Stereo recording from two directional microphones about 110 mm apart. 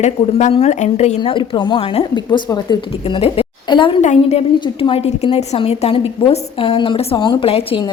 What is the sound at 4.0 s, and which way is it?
Speech, 90° left.